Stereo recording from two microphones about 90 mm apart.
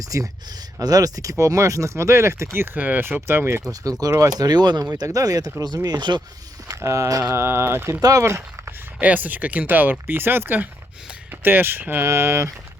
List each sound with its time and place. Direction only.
0.0 s speech: 40° right (ahead or behind)
4.0 s speech: 40° right (ahead or behind)
4.4 s speech: 50° right (ahead or behind)
4.9 s speech: 40° right (ahead or behind)
6.8 s speech: 35° right (ahead or behind)
9.0 s speech: 20° right (ahead or behind)